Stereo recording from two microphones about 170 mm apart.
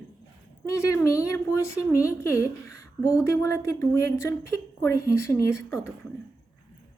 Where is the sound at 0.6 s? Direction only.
20° left (ahead or behind).